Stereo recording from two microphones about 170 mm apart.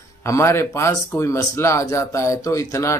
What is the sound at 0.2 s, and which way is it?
Speech, 15° left (ahead or behind).